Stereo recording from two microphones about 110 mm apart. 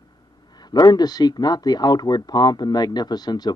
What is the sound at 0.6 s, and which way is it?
Speech, 40° left (ahead or behind).